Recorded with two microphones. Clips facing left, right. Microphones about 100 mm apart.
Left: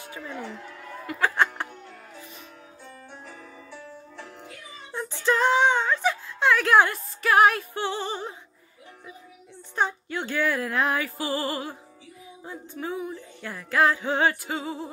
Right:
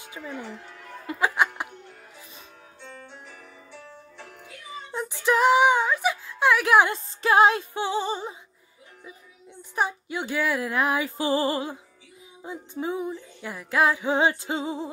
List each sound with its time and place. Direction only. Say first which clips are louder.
1.2 s music: even; 15° right (ahead or behind)
4.9 s a sound: right 1 dB; 15° right (ahead or behind)
9.6 s a woman's voice: even; 15° right (ahead or behind)
11.1 s music: right 4 dB; 20° right (ahead or behind)